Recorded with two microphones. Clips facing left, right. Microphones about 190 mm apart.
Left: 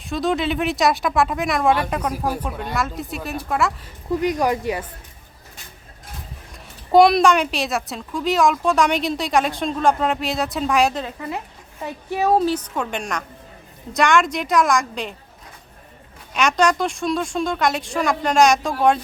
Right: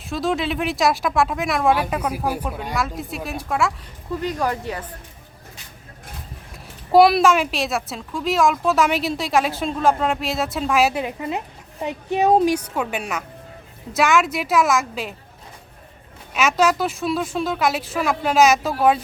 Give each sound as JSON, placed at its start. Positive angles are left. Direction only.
{"t": 0.1, "sound": "a woman's voice", "side_deg": 0}
{"t": 4.2, "sound": "speech", "side_deg": 15}
{"t": 6.9, "sound": "a woman's voice", "side_deg": -5}
{"t": 11.2, "sound": "a woman's voice", "side_deg": -20}
{"t": 16.3, "sound": "a woman's voice", "side_deg": -5}